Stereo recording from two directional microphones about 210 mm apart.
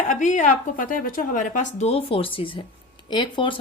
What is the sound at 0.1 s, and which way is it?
Speech, 35° left (ahead or behind).